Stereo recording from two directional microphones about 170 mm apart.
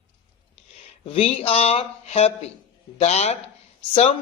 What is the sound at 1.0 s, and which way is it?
A man's voice, 35° left (ahead or behind).